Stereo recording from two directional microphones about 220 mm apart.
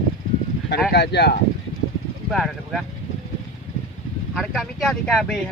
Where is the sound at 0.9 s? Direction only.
50° left (ahead or behind).